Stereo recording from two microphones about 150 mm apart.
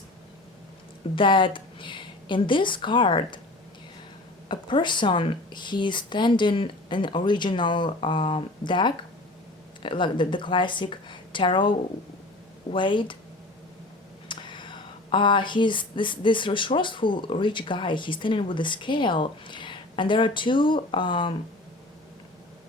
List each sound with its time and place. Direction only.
1.1 s a woman's voice: 35° left (ahead or behind)
4.4 s speech: 30° left (ahead or behind)
12.7 s speech: 35° left (ahead or behind)
14.3 s speech: 30° left (ahead or behind)